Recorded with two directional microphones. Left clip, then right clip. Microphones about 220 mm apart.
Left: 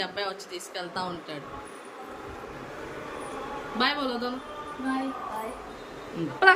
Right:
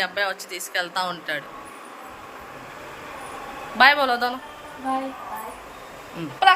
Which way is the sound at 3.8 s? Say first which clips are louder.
Right 11 dB; centre (ahead or behind).